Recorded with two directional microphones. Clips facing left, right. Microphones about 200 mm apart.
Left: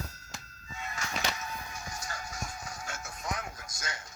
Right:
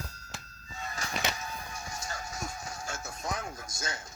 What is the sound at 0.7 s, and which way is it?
Music, 35° right (ahead or behind).